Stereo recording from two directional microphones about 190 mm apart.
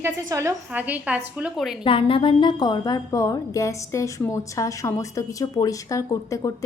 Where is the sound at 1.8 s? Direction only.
30° left (ahead or behind).